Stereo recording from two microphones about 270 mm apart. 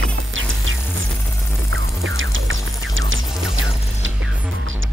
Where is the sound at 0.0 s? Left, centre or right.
Right.